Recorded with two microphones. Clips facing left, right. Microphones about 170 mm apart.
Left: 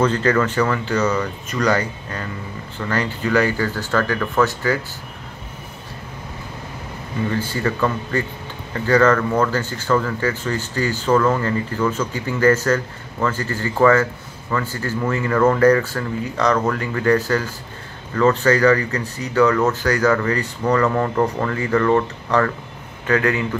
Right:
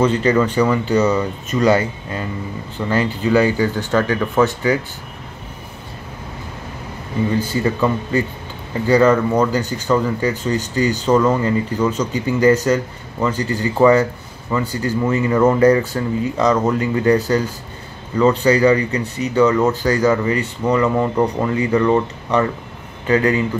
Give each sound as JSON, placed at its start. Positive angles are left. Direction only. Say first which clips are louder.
{"t": 0.0, "sound": "speech", "louder": "right 2 dB", "side_deg": -10}
{"t": 7.2, "sound": "speech", "louder": "right 3 dB", "side_deg": -20}